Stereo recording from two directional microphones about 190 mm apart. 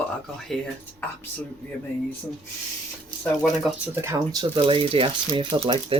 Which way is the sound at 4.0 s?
15° right (ahead or behind).